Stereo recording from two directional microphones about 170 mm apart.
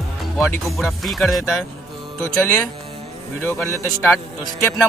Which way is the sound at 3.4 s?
15° left (ahead or behind).